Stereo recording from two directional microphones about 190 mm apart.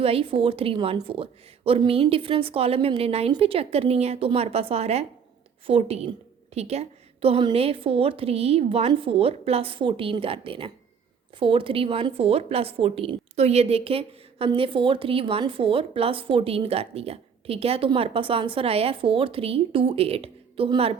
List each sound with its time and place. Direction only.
0.0 s a woman's voice: 30° right (ahead or behind)